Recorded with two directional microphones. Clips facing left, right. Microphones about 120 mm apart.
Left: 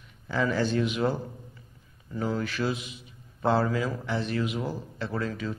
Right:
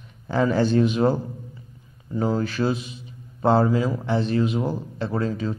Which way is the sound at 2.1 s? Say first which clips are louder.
Right 6 dB; 30° right (ahead or behind).